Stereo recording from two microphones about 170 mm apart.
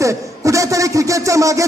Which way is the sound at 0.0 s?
20° right (ahead or behind).